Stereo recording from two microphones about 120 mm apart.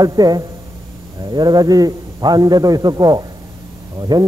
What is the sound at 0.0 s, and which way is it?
A man's voice, 30° right (ahead or behind).